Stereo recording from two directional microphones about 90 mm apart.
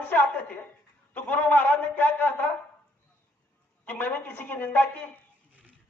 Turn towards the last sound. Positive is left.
turn(degrees=20)  # may be behind; listen again after turning